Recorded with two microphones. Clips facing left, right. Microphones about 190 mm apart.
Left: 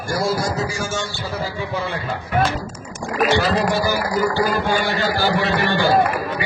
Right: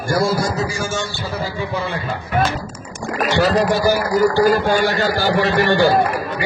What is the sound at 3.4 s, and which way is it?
A man's voice, 45° right (ahead or behind).